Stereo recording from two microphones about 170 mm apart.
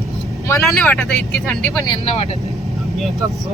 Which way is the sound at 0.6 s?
5° left (ahead or behind).